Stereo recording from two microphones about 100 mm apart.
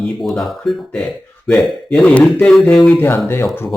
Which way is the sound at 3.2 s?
25° left (ahead or behind).